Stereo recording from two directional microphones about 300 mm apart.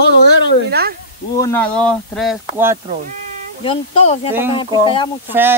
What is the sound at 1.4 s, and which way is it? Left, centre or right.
Speech, centre.